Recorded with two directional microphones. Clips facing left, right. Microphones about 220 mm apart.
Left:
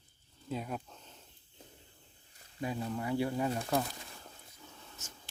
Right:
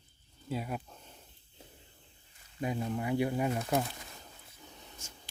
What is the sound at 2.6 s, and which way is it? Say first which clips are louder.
Speech: right 2 dB; 20° right (ahead or behind).